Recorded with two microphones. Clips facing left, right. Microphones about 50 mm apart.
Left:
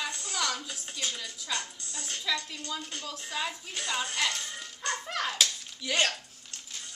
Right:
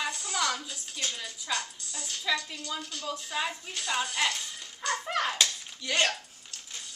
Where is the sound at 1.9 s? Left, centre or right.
Left.